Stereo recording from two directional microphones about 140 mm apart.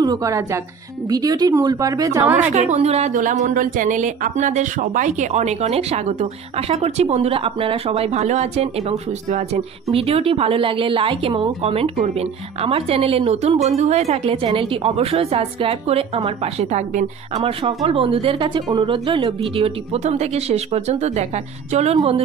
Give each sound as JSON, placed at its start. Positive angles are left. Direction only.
{"t": 0.0, "sound": "speech", "side_deg": -25}
{"t": 2.5, "sound": "a woman's voice", "side_deg": -55}
{"t": 14.3, "sound": "a woman's voice", "side_deg": -40}